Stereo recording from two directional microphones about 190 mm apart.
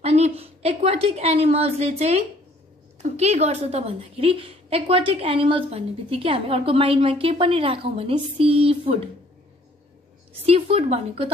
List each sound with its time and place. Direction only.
0.0 s a woman's voice: 35° right (ahead or behind)
10.4 s speech: 30° right (ahead or behind)